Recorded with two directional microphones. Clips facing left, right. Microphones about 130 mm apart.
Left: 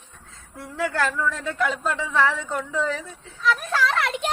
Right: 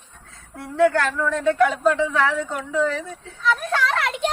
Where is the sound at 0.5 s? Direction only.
Centre (ahead or behind).